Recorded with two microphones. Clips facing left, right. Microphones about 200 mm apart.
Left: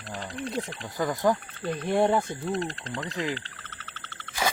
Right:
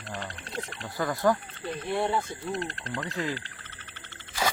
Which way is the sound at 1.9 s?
45° left (ahead or behind).